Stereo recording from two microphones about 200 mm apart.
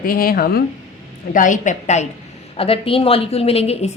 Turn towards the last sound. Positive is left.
turn(degrees=30)  # may be behind; listen again after turning